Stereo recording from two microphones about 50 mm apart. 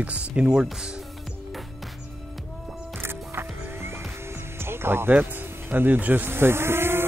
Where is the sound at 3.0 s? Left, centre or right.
Right.